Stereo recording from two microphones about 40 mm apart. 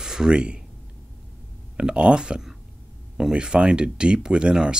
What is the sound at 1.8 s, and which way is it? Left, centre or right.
Speech, right.